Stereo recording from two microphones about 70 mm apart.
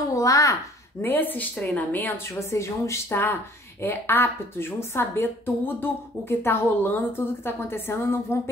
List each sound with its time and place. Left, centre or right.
0.1 s a sound: left
1.0 s speech: left
2.5 s a woman's voice: left